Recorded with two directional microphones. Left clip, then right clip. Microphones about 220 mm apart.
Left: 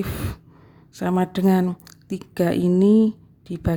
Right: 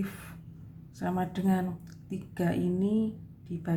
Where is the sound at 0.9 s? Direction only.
45° left (ahead or behind).